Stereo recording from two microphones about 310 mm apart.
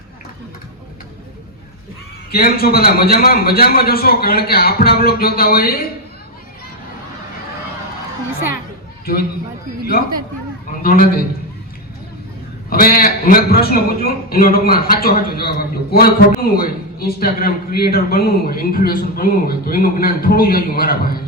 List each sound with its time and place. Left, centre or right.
2.3 s a man's voice: left
9.1 s a man's voice: left
10.7 s a man's voice: left
12.7 s a man's voice: left